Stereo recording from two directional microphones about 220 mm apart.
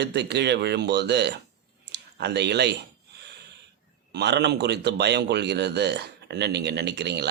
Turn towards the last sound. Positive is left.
turn(degrees=-50)  # may be behind; listen again after turning